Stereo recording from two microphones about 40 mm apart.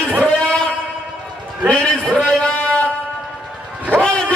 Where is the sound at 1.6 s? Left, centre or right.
Left.